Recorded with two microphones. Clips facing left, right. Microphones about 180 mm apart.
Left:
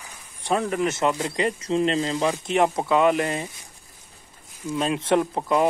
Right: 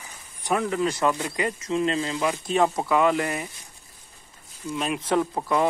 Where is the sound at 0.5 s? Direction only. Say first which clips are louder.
Left 1 dB; 25° left (ahead or behind).